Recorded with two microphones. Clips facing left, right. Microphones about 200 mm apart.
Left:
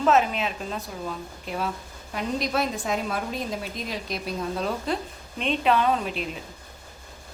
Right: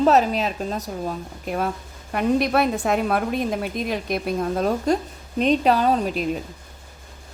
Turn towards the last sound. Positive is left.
turn(degrees=-40)  # may be behind; listen again after turning